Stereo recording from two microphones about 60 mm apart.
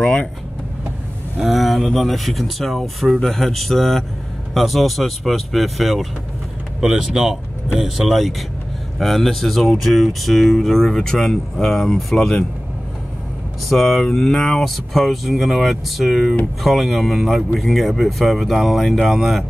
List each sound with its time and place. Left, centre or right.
0.0 s speech: centre
1.4 s speech: centre
13.7 s speech: centre